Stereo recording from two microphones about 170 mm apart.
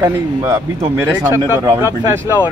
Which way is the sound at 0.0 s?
20° right (ahead or behind).